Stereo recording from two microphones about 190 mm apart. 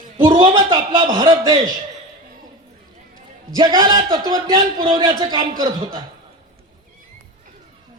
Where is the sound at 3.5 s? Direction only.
20° right (ahead or behind).